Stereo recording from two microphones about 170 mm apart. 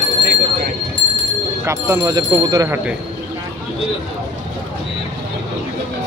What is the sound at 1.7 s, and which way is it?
Speech, 15° right (ahead or behind).